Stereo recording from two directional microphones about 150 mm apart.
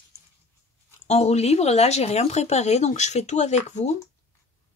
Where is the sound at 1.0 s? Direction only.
45° left (ahead or behind).